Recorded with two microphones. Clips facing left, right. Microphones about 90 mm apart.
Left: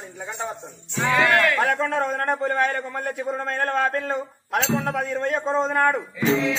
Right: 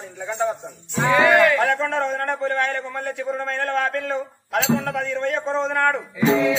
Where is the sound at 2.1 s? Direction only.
40° left (ahead or behind).